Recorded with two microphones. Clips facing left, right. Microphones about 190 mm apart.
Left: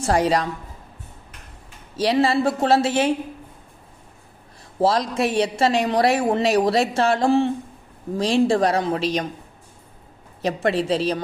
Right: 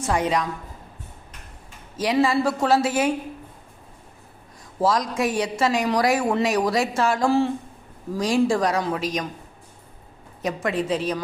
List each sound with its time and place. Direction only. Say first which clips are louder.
0.0 s a woman's voice: left 3 dB; 35° left (ahead or behind)
2.0 s a woman's voice: left 2 dB; 30° left (ahead or behind)
4.8 s a woman's voice: left 2 dB; 30° left (ahead or behind)
10.4 s a woman's voice: left 3 dB; 30° left (ahead or behind)